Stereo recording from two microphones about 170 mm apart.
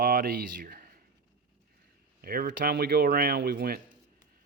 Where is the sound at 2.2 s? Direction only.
60° right (ahead or behind).